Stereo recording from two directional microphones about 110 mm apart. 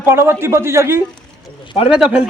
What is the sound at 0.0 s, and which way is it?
A man's voice, 20° right (ahead or behind).